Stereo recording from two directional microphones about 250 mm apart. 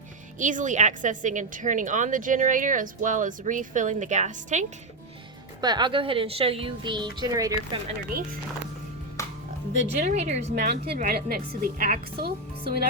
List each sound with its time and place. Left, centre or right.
0.3 s a woman's voice: right
5.5 s a woman's voice: centre
9.7 s a woman's voice: right